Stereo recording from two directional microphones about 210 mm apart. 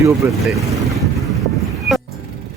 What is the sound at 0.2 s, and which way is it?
Speech, 10° right (ahead or behind).